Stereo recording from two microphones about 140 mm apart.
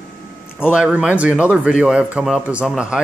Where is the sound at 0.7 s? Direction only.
5° right (ahead or behind).